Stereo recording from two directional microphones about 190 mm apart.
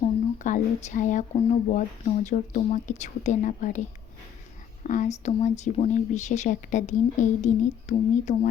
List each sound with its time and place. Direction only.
0.4 s speech: 40° left (ahead or behind)
4.8 s speech: 40° left (ahead or behind)